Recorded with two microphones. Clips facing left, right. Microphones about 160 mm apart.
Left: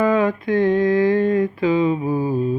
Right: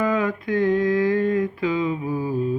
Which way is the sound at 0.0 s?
30° left (ahead or behind).